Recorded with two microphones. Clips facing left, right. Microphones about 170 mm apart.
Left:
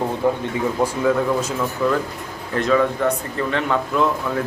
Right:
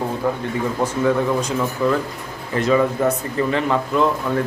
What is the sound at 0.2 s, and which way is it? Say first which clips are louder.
Speech: left 3 dB; 20° left (ahead or behind).